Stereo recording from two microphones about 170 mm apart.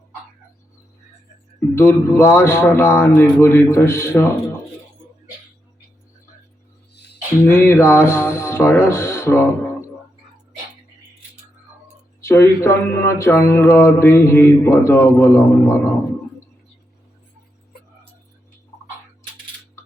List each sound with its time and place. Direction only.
1.7 s speech: 15° left (ahead or behind)
6.9 s music: 80° left
7.4 s speech: 15° left (ahead or behind)
12.2 s speech: 15° left (ahead or behind)